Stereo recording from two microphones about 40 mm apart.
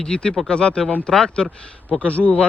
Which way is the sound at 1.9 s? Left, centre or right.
Left.